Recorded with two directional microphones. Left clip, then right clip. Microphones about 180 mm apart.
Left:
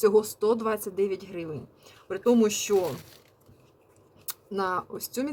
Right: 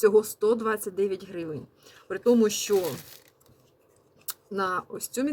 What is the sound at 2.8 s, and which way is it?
Speech, 50° right (ahead or behind).